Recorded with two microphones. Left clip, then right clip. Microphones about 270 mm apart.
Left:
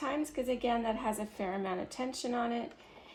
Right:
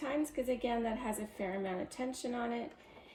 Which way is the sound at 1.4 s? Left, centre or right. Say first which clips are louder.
Left 2 dB; left.